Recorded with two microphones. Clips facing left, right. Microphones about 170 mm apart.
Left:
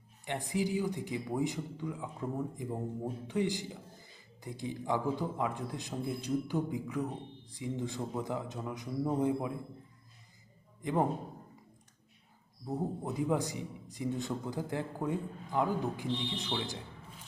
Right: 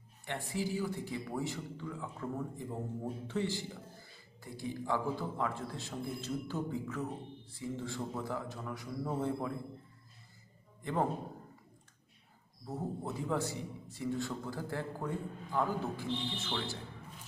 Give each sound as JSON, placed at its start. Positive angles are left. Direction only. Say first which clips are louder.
{"t": 0.3, "sound": "a man's voice", "louder": "left 3 dB", "side_deg": 15}
{"t": 12.6, "sound": "a man's voice", "louder": "left 3 dB", "side_deg": 15}